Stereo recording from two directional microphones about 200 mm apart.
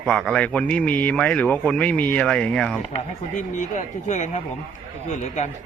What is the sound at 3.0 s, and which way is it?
Speech, 40° left (ahead or behind).